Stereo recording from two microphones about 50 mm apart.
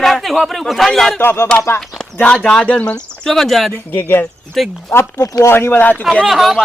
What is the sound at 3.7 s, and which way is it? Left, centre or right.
Speech, left.